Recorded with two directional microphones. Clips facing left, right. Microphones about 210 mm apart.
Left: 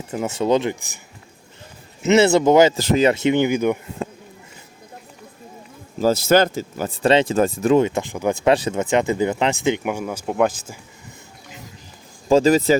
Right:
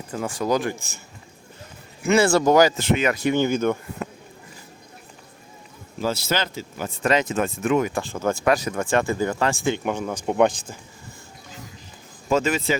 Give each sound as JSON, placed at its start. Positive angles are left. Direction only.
{"t": 0.1, "sound": "speech", "side_deg": 20}
{"t": 2.0, "sound": "speech", "side_deg": 25}
{"t": 2.7, "sound": "speech", "side_deg": 35}
{"t": 6.0, "sound": "speech", "side_deg": 45}
{"t": 9.8, "sound": "speech", "side_deg": 10}
{"t": 12.3, "sound": "speech", "side_deg": 35}